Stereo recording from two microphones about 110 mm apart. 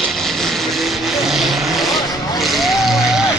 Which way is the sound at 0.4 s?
Centre (ahead or behind).